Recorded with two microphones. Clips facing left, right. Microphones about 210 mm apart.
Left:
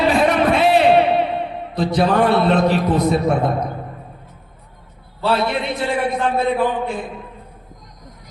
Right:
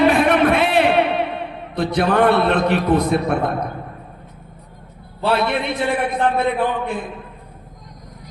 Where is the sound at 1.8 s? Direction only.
60° right (ahead or behind).